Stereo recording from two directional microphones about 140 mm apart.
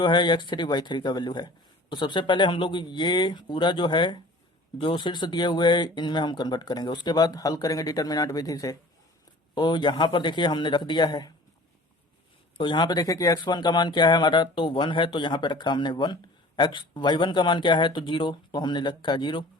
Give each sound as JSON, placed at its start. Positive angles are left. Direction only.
{"t": 0.0, "sound": "speech", "side_deg": 35}
{"t": 12.5, "sound": "speech", "side_deg": 35}